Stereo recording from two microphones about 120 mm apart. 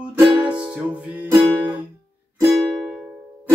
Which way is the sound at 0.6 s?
10° right (ahead or behind).